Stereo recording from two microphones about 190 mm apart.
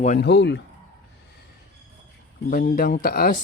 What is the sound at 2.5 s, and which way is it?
Speech, 50° left (ahead or behind).